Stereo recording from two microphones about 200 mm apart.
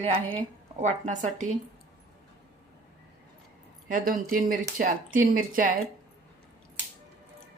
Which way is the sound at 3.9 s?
45° right (ahead or behind).